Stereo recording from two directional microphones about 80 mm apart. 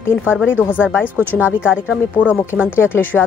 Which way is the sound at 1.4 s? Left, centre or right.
Centre.